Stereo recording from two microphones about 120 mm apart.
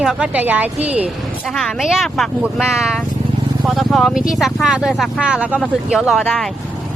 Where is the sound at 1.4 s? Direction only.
Centre (ahead or behind).